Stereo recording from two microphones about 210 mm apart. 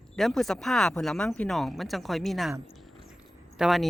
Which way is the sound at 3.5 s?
Centre (ahead or behind).